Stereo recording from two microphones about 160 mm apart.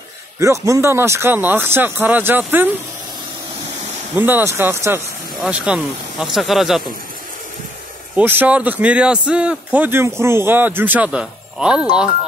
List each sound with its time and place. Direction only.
0.4 s speech: 20° right (ahead or behind)
4.1 s speech: 15° right (ahead or behind)
8.2 s speech: 10° right (ahead or behind)